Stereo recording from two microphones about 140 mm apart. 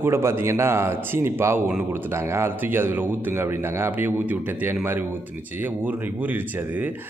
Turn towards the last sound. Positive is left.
turn(degrees=-15)  # may be behind; listen again after turning